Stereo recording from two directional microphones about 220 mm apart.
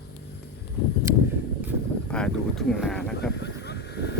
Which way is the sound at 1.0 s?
10° right (ahead or behind).